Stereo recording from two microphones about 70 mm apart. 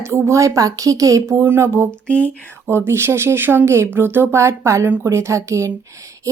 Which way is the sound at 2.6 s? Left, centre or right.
Right.